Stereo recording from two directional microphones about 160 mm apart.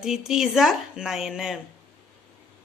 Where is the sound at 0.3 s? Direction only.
Centre (ahead or behind).